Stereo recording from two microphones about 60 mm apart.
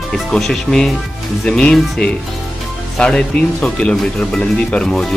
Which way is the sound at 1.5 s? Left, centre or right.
Centre.